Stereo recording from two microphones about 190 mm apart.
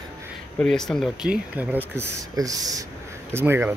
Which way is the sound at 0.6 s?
Centre (ahead or behind).